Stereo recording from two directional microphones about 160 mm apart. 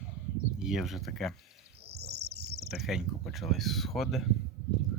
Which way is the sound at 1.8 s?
90° right.